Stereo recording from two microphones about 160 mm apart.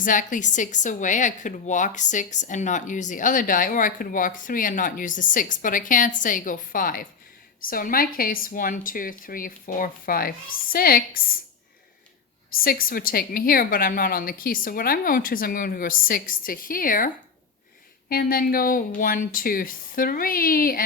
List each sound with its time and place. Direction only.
0.0 s a woman's voice: 55° left (ahead or behind)
12.6 s a woman's voice: 65° left (ahead or behind)
18.1 s a woman's voice: 65° left (ahead or behind)